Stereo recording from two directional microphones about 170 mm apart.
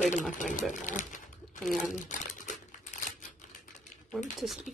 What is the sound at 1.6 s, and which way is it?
Speech, centre (ahead or behind).